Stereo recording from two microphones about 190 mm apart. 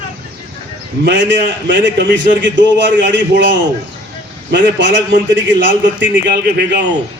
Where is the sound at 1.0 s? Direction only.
70° right (ahead or behind).